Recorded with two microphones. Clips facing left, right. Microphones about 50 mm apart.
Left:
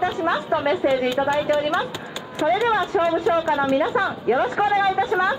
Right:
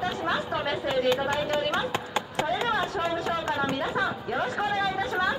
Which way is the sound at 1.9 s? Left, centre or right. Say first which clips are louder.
Right 3 dB; right.